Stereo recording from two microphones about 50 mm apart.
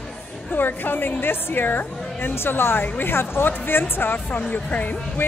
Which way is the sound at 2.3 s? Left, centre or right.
Left.